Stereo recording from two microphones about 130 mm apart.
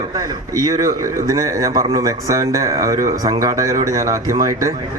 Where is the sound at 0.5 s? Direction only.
25° right (ahead or behind).